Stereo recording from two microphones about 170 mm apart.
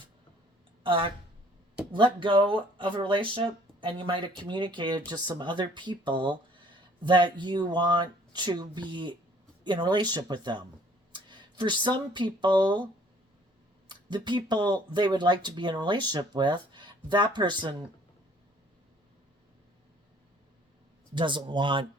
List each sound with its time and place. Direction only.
0.9 s speech: 30° right (ahead or behind)
2.1 s speech: 30° right (ahead or behind)
13.8 s speech: 25° right (ahead or behind)
21.2 s speech: 30° right (ahead or behind)